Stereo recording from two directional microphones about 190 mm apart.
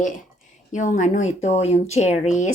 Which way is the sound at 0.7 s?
40° left (ahead or behind).